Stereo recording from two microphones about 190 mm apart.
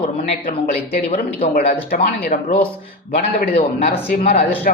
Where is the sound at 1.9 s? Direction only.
55° left (ahead or behind).